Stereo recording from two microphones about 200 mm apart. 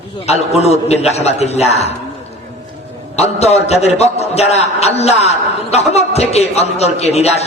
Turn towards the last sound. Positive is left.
turn(degrees=30)  # may be behind; listen again after turning